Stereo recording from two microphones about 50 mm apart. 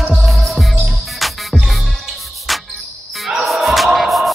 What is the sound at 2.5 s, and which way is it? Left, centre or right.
Cricket, centre.